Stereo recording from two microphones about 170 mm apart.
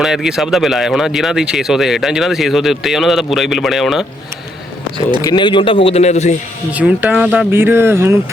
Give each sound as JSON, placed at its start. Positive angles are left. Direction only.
{"t": 0.0, "sound": "speech", "side_deg": -5}
{"t": 5.2, "sound": "a man's voice", "side_deg": 25}
{"t": 6.7, "sound": "speech", "side_deg": -10}